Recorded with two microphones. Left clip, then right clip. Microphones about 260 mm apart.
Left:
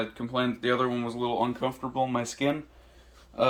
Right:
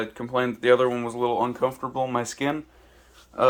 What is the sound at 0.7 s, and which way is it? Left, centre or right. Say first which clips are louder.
Speech: right 11 dB; centre.